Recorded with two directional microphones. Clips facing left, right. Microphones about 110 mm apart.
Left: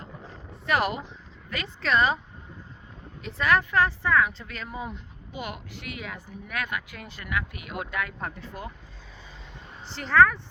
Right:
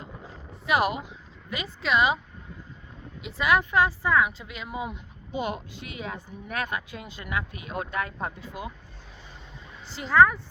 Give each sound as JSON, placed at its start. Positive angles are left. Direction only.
{"t": 0.2, "sound": "a sound", "side_deg": -5}
{"t": 3.2, "sound": "speech", "side_deg": -10}
{"t": 5.3, "sound": "speech", "side_deg": -25}
{"t": 8.4, "sound": "speech", "side_deg": -15}
{"t": 9.9, "sound": "speech", "side_deg": -10}